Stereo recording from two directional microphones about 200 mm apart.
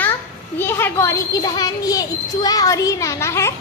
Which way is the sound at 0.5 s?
10° left (ahead or behind).